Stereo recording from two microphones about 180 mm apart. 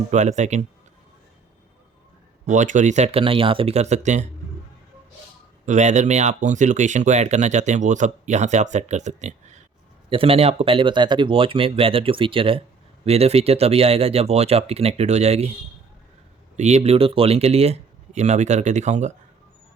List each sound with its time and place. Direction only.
0.1 s speech: 40° right (ahead or behind)
2.5 s speech: 45° right (ahead or behind)
5.6 s speech: 40° right (ahead or behind)
16.6 s speech: 40° right (ahead or behind)